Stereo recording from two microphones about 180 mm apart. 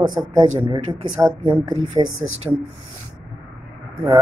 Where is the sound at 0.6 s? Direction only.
35° right (ahead or behind).